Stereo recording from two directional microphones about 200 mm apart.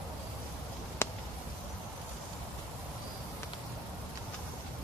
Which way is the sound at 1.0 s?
10° left (ahead or behind).